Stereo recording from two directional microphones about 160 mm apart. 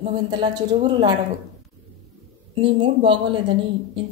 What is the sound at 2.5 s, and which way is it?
A woman's voice, 35° right (ahead or behind).